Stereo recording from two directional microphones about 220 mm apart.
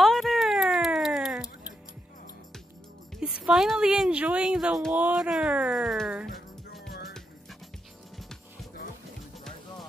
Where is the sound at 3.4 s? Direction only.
Centre (ahead or behind).